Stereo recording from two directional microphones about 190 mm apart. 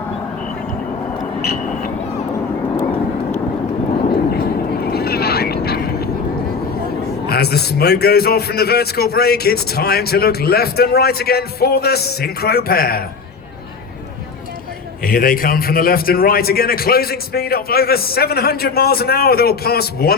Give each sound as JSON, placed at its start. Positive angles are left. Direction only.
{"t": 1.2, "sound": "a sound", "side_deg": 55}
{"t": 4.3, "sound": "vehicle", "side_deg": 55}
{"t": 7.3, "sound": "a man's voice", "side_deg": 55}
{"t": 15.0, "sound": "a man's voice", "side_deg": 50}